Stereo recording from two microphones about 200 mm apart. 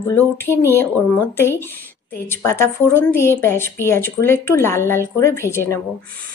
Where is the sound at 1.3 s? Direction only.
10° left (ahead or behind).